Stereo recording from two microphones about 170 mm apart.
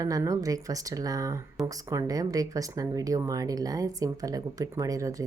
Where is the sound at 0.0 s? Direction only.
20° right (ahead or behind).